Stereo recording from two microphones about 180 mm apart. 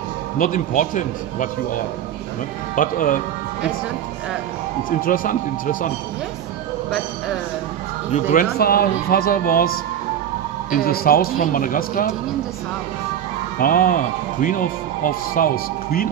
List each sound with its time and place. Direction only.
0.4 s a man's voice: 45° left (ahead or behind)
2.7 s a man's voice: 50° left (ahead or behind)
4.8 s a man's voice: 50° left (ahead or behind)
8.1 s a man's voice: 50° left (ahead or behind)
13.6 s a man's voice: 50° left (ahead or behind)